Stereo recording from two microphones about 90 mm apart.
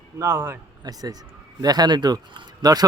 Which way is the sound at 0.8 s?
50° right (ahead or behind).